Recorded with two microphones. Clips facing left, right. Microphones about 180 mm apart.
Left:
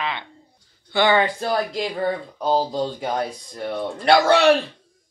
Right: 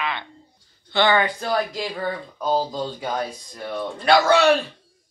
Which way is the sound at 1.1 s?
25° left (ahead or behind).